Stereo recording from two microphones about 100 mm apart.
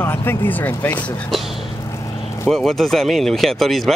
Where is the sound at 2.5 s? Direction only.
5° left (ahead or behind).